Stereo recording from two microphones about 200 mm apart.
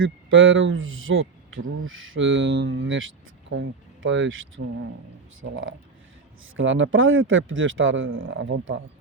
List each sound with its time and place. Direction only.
0.0 s speech: 80° right
6.6 s speech: 75° right (ahead or behind)